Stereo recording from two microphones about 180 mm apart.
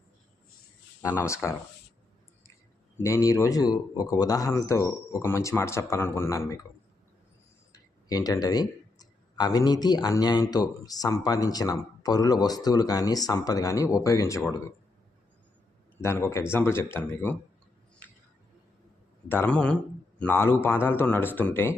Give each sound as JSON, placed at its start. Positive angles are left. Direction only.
{"t": 1.0, "sound": "a man's voice", "side_deg": 15}
{"t": 3.0, "sound": "a man's voice", "side_deg": 15}
{"t": 7.7, "sound": "speech", "side_deg": 20}
{"t": 16.0, "sound": "a man's voice", "side_deg": 15}
{"t": 19.3, "sound": "a man's voice", "side_deg": 10}